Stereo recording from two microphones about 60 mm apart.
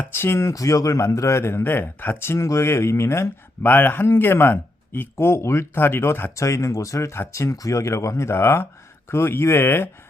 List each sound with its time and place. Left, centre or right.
0.1 s speech: left
0.5 s a man's voice: left
2.2 s speech: left
3.6 s speech: left
6.3 s a man's voice: left